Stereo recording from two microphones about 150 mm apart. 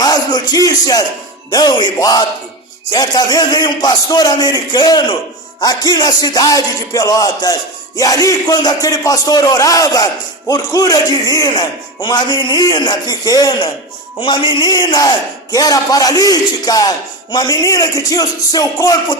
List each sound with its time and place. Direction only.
0.0 s music: 25° left (ahead or behind)
1.5 s a man's voice: 25° left (ahead or behind)